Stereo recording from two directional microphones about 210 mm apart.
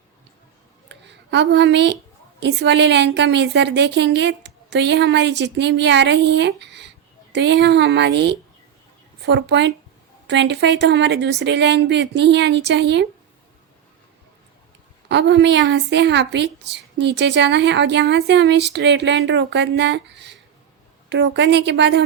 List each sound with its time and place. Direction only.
0.9 s a sound: 55° right (ahead or behind)
2.4 s a woman's voice: 55° right (ahead or behind)
15.1 s a woman's voice: 55° right (ahead or behind)